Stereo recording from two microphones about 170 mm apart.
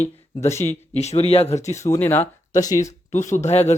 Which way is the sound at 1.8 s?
10° left (ahead or behind).